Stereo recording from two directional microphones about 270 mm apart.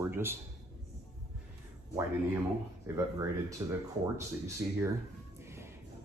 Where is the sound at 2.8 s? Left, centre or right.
Centre.